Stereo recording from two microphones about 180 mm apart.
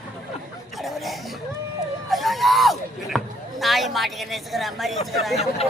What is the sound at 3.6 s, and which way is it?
Speech, centre (ahead or behind).